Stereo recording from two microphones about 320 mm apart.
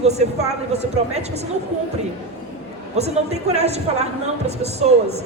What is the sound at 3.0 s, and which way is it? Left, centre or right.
A woman's voice, centre.